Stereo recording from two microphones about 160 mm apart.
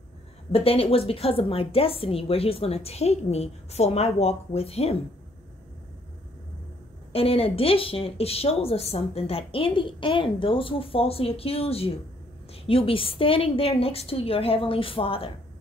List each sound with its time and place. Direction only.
0.5 s speech: 35° left (ahead or behind)
7.1 s speech: 35° left (ahead or behind)